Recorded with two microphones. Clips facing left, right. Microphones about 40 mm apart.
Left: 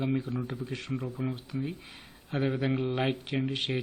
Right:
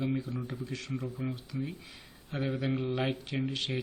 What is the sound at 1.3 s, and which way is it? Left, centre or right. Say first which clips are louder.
Speech: left 2 dB; left.